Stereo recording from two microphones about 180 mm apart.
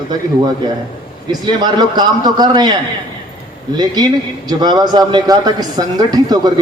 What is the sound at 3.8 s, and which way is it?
A man's voice, 20° right (ahead or behind).